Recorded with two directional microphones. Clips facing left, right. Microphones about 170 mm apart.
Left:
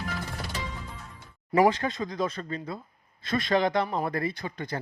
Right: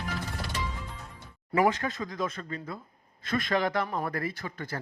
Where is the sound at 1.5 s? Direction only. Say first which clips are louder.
Left 3 dB; 30° left (ahead or behind).